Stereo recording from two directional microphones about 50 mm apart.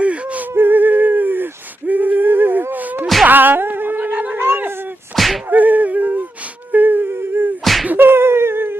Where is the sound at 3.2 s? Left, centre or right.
Right.